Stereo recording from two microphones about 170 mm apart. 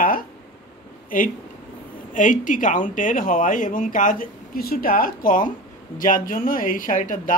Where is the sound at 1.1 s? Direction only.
55° left (ahead or behind).